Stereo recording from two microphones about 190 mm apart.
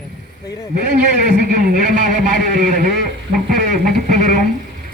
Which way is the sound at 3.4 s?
45° right (ahead or behind).